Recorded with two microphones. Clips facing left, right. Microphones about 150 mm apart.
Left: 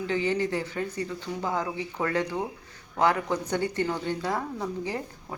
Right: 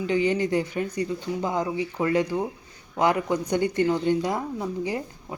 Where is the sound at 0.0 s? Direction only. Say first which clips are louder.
Right 3 dB; 15° right (ahead or behind).